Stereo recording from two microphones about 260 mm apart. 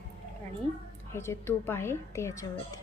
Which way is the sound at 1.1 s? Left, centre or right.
Centre.